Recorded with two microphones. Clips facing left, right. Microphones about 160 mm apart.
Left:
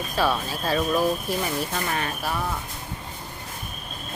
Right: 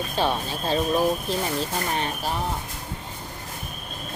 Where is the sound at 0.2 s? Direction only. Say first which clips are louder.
Left 1 dB; 25° right (ahead or behind).